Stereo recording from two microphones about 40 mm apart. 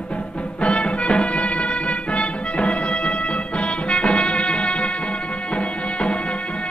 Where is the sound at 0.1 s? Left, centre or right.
Left.